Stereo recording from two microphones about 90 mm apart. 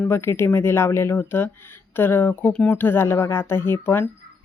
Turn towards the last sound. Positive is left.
turn(degrees=25)  # may be behind; listen again after turning